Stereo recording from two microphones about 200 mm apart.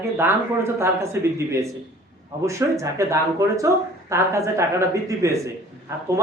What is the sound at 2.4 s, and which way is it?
Speech, 15° right (ahead or behind).